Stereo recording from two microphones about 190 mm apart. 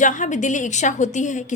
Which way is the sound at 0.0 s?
40° left (ahead or behind).